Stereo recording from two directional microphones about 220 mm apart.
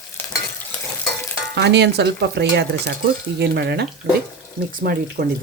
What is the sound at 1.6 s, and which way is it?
Speech, 50° right (ahead or behind).